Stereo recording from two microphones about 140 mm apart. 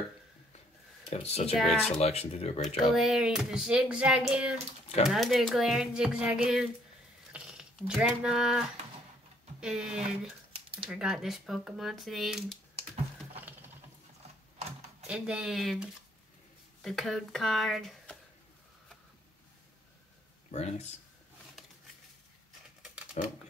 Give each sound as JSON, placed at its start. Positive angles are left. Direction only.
{"t": 1.1, "sound": "speech", "side_deg": 45}
{"t": 1.6, "sound": "speech", "side_deg": 0}
{"t": 1.9, "sound": "speech", "side_deg": 50}
{"t": 2.6, "sound": "speech", "side_deg": 0}
{"t": 13.4, "sound": "patter", "side_deg": -15}
{"t": 15.0, "sound": "speech", "side_deg": -5}
{"t": 20.5, "sound": "speech", "side_deg": 50}
{"t": 23.2, "sound": "speech", "side_deg": 45}